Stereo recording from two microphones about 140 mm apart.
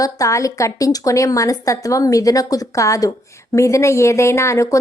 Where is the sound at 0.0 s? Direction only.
25° left (ahead or behind).